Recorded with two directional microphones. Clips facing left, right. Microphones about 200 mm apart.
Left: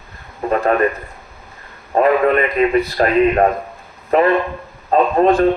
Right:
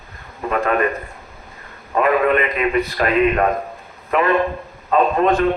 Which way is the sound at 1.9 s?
35° left (ahead or behind).